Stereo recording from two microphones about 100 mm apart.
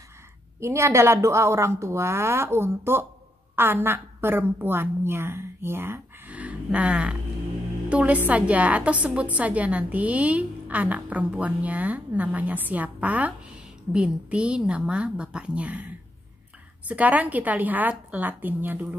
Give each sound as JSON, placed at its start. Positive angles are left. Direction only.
{"t": 0.6, "sound": "a woman's voice", "side_deg": -30}